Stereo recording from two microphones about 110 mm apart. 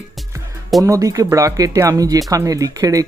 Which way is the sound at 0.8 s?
30° right (ahead or behind).